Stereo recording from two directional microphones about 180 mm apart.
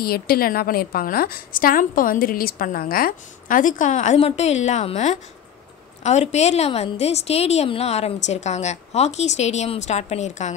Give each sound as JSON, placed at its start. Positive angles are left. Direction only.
{"t": 0.0, "sound": "a woman's voice", "side_deg": 55}